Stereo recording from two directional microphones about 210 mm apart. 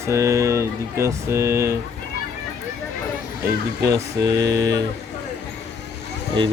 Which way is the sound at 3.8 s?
15° right (ahead or behind).